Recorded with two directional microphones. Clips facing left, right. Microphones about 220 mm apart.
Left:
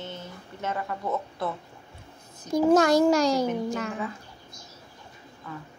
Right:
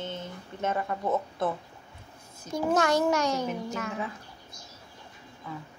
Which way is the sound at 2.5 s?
35° left (ahead or behind).